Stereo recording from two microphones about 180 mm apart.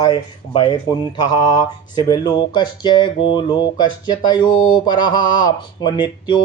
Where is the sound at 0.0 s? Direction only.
25° left (ahead or behind).